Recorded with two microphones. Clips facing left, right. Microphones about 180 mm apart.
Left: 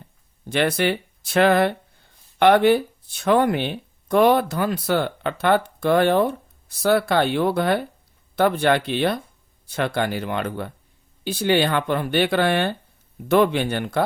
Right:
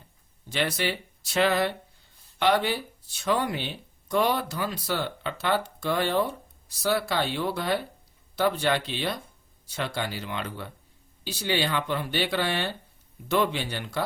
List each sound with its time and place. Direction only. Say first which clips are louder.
0.4 s speech: left 7 dB; 55° left (ahead or behind)